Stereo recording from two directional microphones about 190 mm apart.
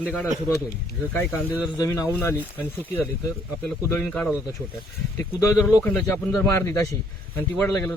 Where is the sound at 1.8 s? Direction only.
15° left (ahead or behind).